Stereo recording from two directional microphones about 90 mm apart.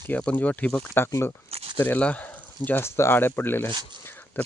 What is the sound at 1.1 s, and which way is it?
Speech, 30° left (ahead or behind).